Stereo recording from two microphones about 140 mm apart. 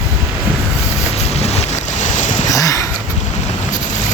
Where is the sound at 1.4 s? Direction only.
55° left (ahead or behind).